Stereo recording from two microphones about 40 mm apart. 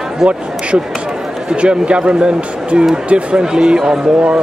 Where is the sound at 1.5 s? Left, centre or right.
Right.